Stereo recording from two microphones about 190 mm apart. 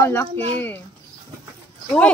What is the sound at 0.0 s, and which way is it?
Speech, 10° left (ahead or behind).